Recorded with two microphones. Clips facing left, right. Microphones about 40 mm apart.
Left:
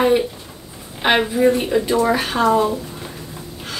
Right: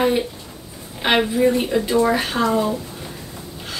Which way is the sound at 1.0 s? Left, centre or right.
Centre.